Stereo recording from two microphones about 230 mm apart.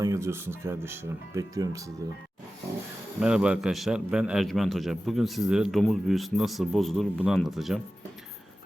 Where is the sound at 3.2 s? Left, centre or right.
Centre.